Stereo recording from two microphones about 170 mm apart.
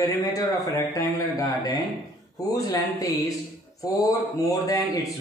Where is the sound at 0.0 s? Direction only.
20° left (ahead or behind).